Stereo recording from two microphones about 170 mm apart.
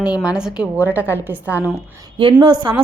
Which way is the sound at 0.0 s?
5° right (ahead or behind).